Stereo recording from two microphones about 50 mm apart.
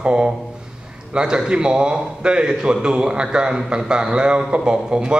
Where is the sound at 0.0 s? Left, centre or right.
Centre.